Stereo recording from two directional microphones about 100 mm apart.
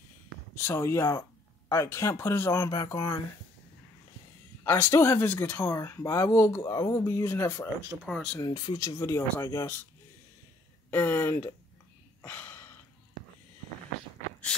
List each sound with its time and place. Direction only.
0.6 s speech: 25° left (ahead or behind)
4.6 s speech: 25° left (ahead or behind)
6.9 s speech: 25° left (ahead or behind)
8.0 s speech: centre (ahead or behind)
8.4 s speech: 50° left (ahead or behind)
8.7 s speech: 30° left (ahead or behind)
10.9 s speech: 20° left (ahead or behind)
12.2 s a sound: 20° left (ahead or behind)